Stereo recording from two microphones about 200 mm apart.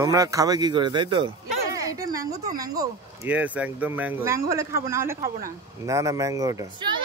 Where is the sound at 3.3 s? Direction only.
5° right (ahead or behind).